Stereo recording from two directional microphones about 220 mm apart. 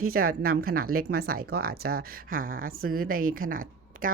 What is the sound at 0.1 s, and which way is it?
Speech, 40° right (ahead or behind).